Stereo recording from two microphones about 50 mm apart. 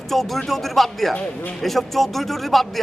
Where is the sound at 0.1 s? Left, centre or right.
Centre.